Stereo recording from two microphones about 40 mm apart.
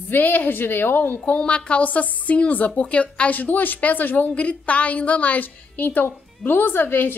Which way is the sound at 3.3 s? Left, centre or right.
Left.